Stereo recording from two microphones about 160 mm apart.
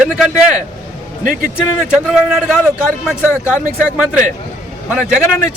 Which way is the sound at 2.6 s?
15° left (ahead or behind).